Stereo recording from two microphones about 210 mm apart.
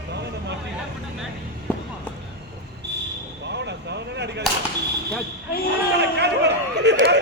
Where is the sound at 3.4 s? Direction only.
55° right (ahead or behind).